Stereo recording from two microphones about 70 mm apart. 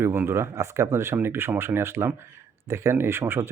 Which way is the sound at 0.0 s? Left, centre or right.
Right.